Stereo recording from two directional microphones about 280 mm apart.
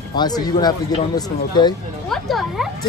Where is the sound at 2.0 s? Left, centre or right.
Centre.